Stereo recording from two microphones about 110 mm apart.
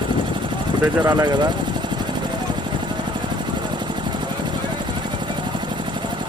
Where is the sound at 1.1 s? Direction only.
35° right (ahead or behind).